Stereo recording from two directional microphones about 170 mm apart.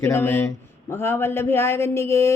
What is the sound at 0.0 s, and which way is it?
Speech, 15° left (ahead or behind).